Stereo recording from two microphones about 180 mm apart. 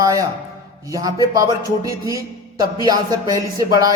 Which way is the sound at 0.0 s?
20° right (ahead or behind).